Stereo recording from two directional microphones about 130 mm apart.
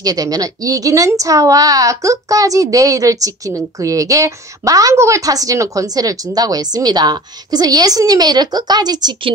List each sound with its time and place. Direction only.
0.0 s a woman's voice: 30° right (ahead or behind)